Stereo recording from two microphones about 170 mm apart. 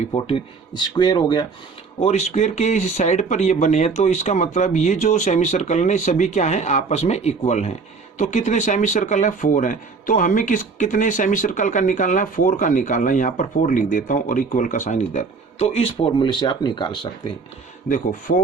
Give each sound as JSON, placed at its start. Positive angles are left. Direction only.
{"t": 0.1, "sound": "speech", "side_deg": 30}
{"t": 2.0, "sound": "speech", "side_deg": 40}
{"t": 17.8, "sound": "speech", "side_deg": 50}